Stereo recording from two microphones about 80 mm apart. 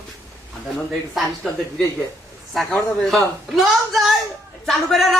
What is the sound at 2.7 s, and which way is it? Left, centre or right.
Speech, centre.